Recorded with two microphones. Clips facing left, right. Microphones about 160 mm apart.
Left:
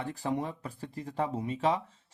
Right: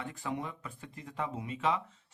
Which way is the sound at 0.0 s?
35° left (ahead or behind).